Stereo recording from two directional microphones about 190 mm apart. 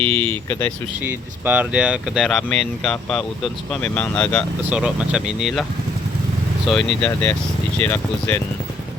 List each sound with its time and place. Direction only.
0.3 s speech: 10° left (ahead or behind)
1.5 s speech: 10° right (ahead or behind)
4.7 s speech: 5° right (ahead or behind)
6.7 s speech: 5° left (ahead or behind)